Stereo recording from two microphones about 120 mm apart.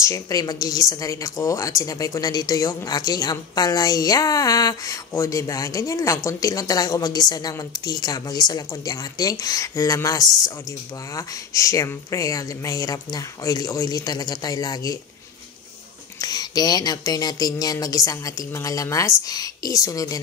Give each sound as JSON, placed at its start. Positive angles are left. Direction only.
{"t": 0.0, "sound": "speech", "side_deg": 30}
{"t": 16.2, "sound": "speech", "side_deg": 35}